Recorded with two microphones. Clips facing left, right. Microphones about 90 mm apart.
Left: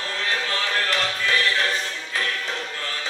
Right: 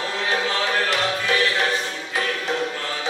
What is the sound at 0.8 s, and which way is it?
Music, 15° right (ahead or behind).